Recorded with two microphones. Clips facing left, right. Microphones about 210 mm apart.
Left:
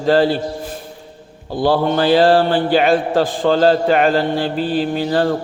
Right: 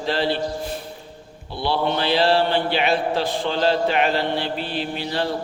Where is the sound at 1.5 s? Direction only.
45° left (ahead or behind).